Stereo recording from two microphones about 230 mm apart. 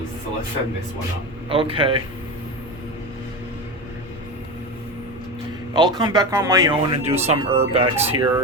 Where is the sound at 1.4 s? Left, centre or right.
Right.